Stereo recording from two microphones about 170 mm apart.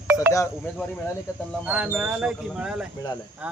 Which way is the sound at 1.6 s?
5° right (ahead or behind).